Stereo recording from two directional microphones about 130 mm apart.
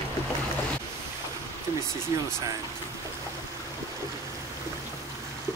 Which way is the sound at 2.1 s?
25° right (ahead or behind).